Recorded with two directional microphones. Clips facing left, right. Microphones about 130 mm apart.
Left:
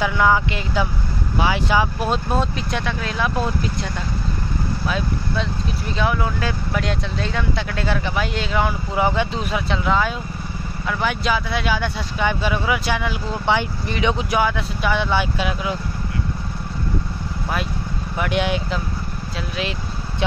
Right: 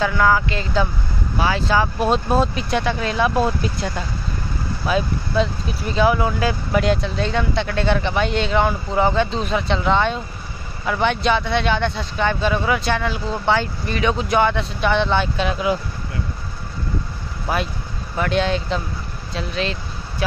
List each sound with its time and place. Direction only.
0.0 s speech: 15° left (ahead or behind)
2.0 s speech: centre (ahead or behind)
18.1 s speech: 15° left (ahead or behind)